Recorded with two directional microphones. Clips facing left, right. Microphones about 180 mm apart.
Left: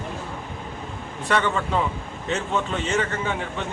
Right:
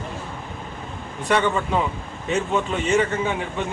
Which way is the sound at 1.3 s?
15° right (ahead or behind).